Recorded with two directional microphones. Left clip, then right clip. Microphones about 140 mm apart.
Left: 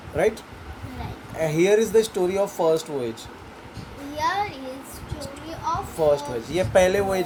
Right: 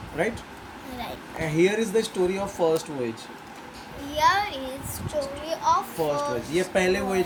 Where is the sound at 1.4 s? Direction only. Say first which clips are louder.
Left 4 dB; 35° left (ahead or behind).